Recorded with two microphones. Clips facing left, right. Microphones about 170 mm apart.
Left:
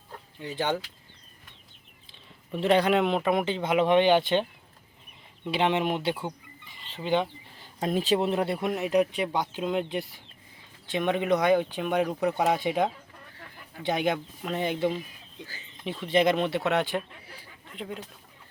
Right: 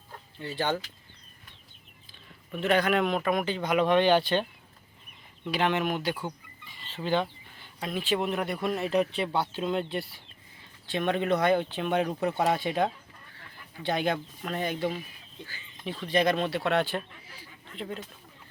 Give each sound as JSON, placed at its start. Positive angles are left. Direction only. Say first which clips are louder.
{"t": 0.3, "sound": "speech", "louder": "left 1 dB", "side_deg": 15}
{"t": 2.5, "sound": "speech", "louder": "left 3 dB", "side_deg": 30}
{"t": 5.5, "sound": "speech", "louder": "left 2 dB", "side_deg": 25}
{"t": 6.8, "sound": "speech", "louder": "left 1 dB", "side_deg": 15}
{"t": 7.6, "sound": "speech", "louder": "left 6 dB", "side_deg": 40}
{"t": 16.0, "sound": "speech", "louder": "left 2 dB", "side_deg": 20}